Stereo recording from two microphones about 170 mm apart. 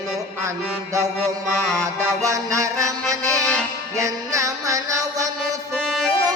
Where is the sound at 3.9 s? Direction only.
20° right (ahead or behind).